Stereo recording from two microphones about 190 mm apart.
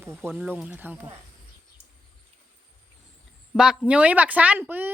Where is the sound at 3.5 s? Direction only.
5° right (ahead or behind).